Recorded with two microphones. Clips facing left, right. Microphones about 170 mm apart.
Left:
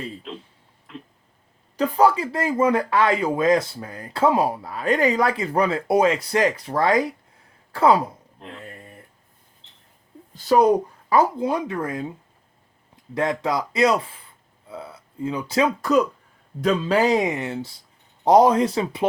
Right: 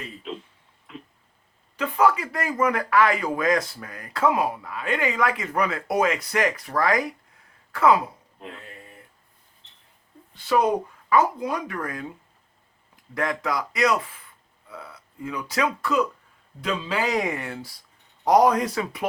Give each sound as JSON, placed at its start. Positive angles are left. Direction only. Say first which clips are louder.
{"t": 0.3, "sound": "a sound", "louder": "right 1 dB", "side_deg": 0}
{"t": 1.7, "sound": "speech", "louder": "left 3 dB", "side_deg": 35}
{"t": 8.4, "sound": "speech", "louder": "even", "side_deg": -5}
{"t": 10.3, "sound": "speech", "louder": "left 5 dB", "side_deg": 40}
{"t": 11.1, "sound": "speech", "louder": "left 2 dB", "side_deg": 25}
{"t": 13.1, "sound": "speech", "louder": "left 3 dB", "side_deg": 25}
{"t": 16.6, "sound": "a man's voice", "louder": "left 7 dB", "side_deg": 45}
{"t": 17.1, "sound": "speech", "louder": "left 5 dB", "side_deg": 20}